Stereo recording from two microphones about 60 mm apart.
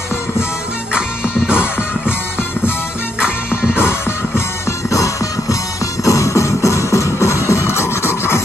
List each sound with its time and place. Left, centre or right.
0.9 s music: centre
3.2 s music: centre
4.8 s music: left